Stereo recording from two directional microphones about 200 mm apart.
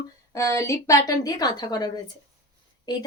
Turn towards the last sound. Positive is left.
turn(degrees=20)  # may be behind; listen again after turning